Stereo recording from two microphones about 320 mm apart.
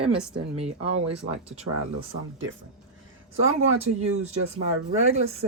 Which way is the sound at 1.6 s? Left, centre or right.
Right.